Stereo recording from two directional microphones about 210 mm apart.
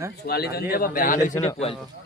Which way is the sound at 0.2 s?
50° left (ahead or behind).